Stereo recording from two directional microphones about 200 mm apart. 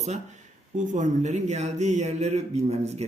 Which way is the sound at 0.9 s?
35° right (ahead or behind).